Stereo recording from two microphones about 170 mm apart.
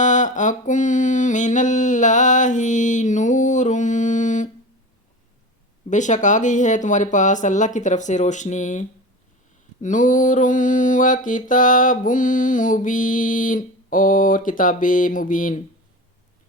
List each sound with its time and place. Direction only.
0.0 s mantra: 45° left (ahead or behind)
5.9 s mantra: 45° left (ahead or behind)